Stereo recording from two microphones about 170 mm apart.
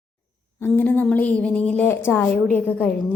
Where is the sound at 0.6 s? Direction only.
10° left (ahead or behind).